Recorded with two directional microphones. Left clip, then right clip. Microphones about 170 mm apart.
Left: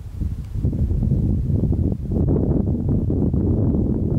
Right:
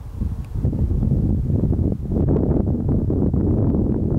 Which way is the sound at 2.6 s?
50° left (ahead or behind).